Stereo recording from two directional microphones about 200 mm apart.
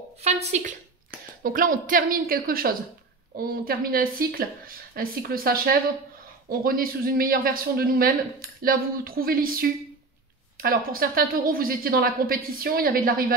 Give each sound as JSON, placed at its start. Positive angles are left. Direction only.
{"t": 0.2, "sound": "speech", "side_deg": -30}